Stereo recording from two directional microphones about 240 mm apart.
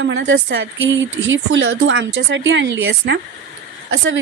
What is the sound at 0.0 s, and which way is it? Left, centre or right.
Speech, right.